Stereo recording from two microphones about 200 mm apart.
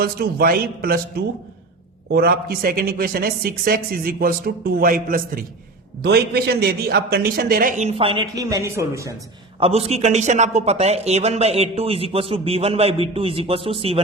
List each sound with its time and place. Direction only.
0.0 s speech: 50° right (ahead or behind); by 9.1 s 15° right (ahead or behind)
9.6 s speech: 30° right (ahead or behind)